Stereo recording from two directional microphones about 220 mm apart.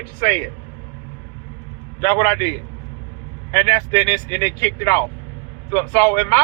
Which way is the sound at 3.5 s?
15° left (ahead or behind).